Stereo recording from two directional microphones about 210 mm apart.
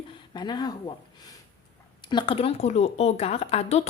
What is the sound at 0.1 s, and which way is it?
Speech, 20° left (ahead or behind).